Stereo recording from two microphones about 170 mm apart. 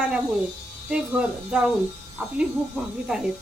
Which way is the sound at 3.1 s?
5° right (ahead or behind).